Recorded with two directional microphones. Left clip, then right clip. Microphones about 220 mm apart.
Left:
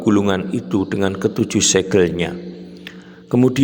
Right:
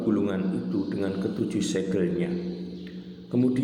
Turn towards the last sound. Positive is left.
turn(degrees=50)  # may be behind; listen again after turning